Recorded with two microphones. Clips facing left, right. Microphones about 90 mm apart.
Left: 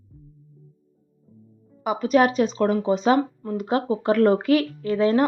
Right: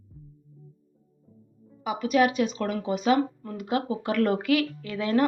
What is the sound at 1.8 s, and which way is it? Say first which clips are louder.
Speech: left 4 dB; 40° left (ahead or behind).